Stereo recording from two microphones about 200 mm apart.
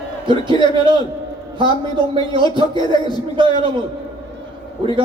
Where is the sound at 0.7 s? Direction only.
25° right (ahead or behind).